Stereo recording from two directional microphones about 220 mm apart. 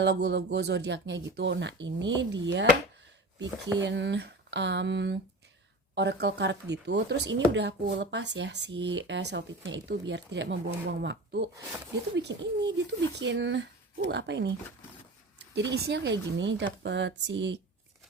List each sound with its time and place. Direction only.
0.0 s speech: 50° right (ahead or behind)
15.5 s speech: 50° right (ahead or behind)